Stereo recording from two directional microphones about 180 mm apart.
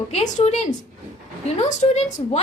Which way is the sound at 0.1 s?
40° left (ahead or behind).